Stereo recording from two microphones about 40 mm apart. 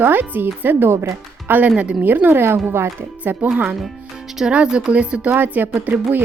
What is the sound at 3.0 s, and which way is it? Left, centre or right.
Speech, right.